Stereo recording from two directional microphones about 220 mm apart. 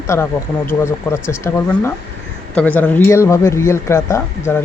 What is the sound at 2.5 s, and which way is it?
Speech, 5° left (ahead or behind).